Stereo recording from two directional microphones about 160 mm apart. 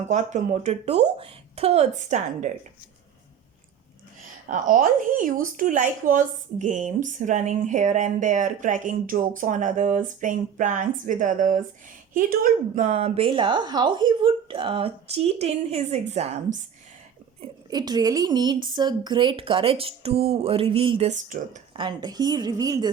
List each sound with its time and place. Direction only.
0.1 s speech: 50° right (ahead or behind)
4.4 s speech: 55° right (ahead or behind)
17.4 s speech: 25° right (ahead or behind)
21.1 s speech: 50° right (ahead or behind)
21.7 s a woman's voice: 30° right (ahead or behind)